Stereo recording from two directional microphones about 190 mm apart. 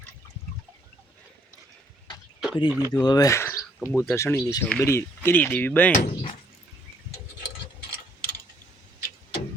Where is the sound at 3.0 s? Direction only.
20° left (ahead or behind).